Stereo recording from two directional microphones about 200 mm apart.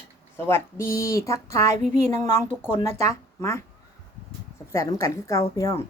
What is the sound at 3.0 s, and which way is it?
Speech, 15° left (ahead or behind).